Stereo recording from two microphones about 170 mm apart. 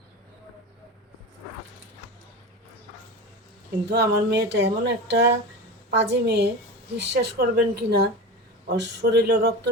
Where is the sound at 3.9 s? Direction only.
85° right.